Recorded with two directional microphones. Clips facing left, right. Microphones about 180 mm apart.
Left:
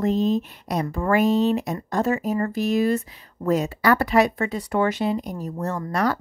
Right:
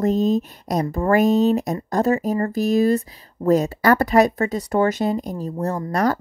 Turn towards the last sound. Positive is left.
turn(degrees=-40)  # may be behind; listen again after turning